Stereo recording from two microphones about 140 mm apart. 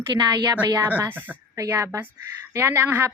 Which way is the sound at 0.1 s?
30° right (ahead or behind).